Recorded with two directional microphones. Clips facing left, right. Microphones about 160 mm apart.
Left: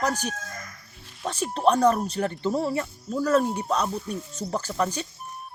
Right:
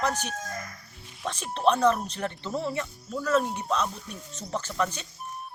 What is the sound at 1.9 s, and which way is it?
Speech, 40° left (ahead or behind).